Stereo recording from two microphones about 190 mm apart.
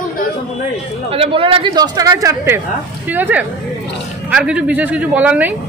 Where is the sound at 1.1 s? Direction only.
30° right (ahead or behind).